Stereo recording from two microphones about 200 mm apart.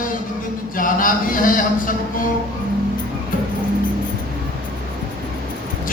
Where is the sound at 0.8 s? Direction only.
45° left (ahead or behind).